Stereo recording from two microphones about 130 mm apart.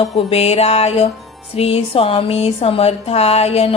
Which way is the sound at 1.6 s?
50° left (ahead or behind).